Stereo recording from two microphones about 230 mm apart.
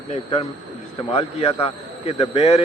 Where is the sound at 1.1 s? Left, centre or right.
Left.